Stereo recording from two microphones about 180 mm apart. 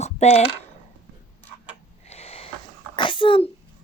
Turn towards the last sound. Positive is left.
turn(degrees=30)  # may be behind; listen again after turning